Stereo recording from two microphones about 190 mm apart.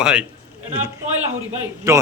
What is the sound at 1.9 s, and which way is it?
Speech, 15° right (ahead or behind).